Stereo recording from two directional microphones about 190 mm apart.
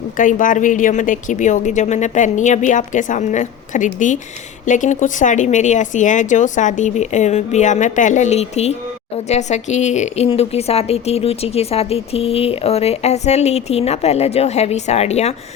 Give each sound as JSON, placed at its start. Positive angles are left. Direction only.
{"t": 0.2, "sound": "speech", "side_deg": 45}